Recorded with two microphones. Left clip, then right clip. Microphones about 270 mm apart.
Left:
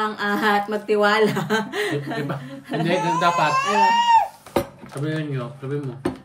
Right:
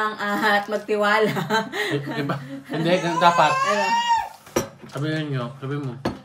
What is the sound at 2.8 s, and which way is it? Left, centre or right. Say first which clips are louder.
Speech: right 2 dB; centre.